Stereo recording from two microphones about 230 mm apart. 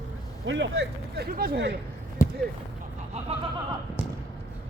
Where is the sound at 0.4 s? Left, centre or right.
Right.